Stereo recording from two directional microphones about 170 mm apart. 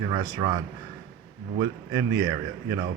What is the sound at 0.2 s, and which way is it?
Speech, 25° right (ahead or behind).